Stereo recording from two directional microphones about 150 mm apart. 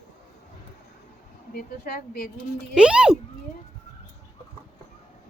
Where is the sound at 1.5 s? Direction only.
90° left.